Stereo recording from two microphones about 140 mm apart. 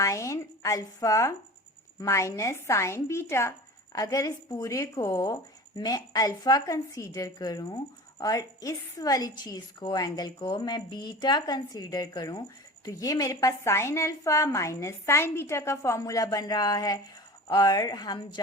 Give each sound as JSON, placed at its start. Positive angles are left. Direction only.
{"t": 0.0, "sound": "a woman's voice", "side_deg": 20}